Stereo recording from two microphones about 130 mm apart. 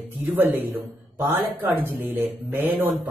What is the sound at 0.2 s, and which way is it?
Speech, 15° right (ahead or behind).